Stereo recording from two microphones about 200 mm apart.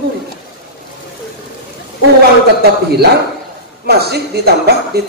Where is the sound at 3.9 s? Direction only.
55° right (ahead or behind).